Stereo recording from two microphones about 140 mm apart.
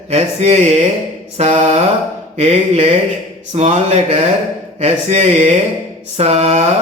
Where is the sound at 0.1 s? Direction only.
50° right (ahead or behind).